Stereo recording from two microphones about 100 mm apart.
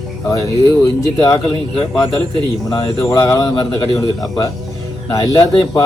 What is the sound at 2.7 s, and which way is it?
Speech, 35° left (ahead or behind).